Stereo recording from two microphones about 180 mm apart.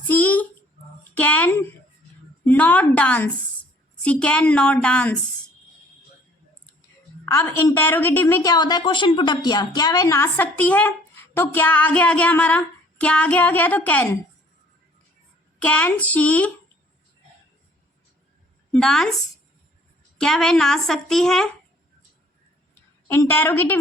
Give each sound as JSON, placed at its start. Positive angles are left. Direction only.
{"t": 0.1, "sound": "a sound", "side_deg": 10}
{"t": 1.1, "sound": "a woman's voice", "side_deg": 10}
{"t": 7.3, "sound": "a woman's voice", "side_deg": 15}
{"t": 8.5, "sound": "a woman's voice", "side_deg": 25}
{"t": 15.5, "sound": "a woman's voice", "side_deg": 10}
{"t": 18.7, "sound": "a woman's voice", "side_deg": 5}
{"t": 20.1, "sound": "a woman's voice", "side_deg": 5}
{"t": 23.0, "sound": "a woman's voice", "side_deg": 10}